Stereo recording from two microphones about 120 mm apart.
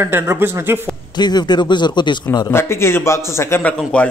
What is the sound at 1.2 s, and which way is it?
A man's voice, 35° left (ahead or behind).